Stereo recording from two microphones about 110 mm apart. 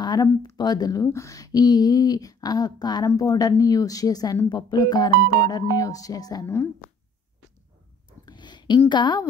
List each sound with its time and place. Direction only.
0.0 s a woman's voice: 40° left (ahead or behind)
6.4 s speech: 25° left (ahead or behind)
8.3 s a sound: 45° left (ahead or behind)